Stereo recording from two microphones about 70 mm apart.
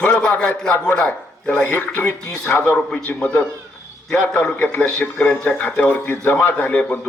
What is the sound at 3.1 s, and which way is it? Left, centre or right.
A man's voice, centre.